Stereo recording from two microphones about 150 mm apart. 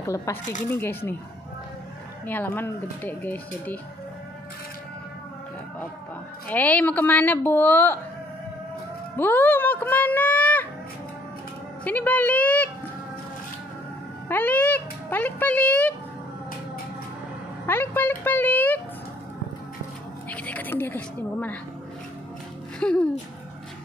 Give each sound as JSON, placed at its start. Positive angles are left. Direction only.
{"t": 0.0, "sound": "speech", "side_deg": 20}
{"t": 2.2, "sound": "speech", "side_deg": 15}
{"t": 6.5, "sound": "speech", "side_deg": 10}
{"t": 9.1, "sound": "speech", "side_deg": 15}
{"t": 11.8, "sound": "speech", "side_deg": 10}
{"t": 14.3, "sound": "speech", "side_deg": 10}
{"t": 17.6, "sound": "speech", "side_deg": 15}
{"t": 20.2, "sound": "a woman's voice", "side_deg": 10}
{"t": 22.8, "sound": "speech", "side_deg": 5}